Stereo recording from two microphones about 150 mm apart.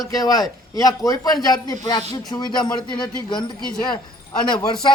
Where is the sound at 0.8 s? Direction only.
25° left (ahead or behind).